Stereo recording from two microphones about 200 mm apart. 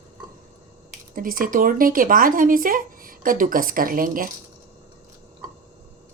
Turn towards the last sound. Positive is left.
turn(degrees=-45)  # may be behind; listen again after turning